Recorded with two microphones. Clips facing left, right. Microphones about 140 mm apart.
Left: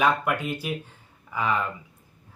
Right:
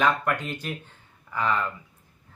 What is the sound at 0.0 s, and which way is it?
Speech, 10° left (ahead or behind).